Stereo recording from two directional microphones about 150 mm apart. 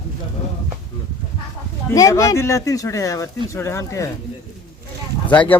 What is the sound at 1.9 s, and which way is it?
Speech, 20° left (ahead or behind).